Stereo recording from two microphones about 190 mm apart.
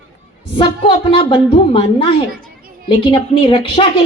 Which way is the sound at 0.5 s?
25° left (ahead or behind).